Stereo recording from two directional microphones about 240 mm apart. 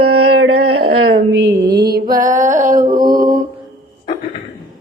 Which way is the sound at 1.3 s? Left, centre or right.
Right.